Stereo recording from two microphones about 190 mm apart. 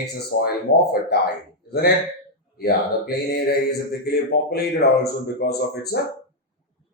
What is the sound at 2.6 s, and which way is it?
A man's voice, 55° left (ahead or behind).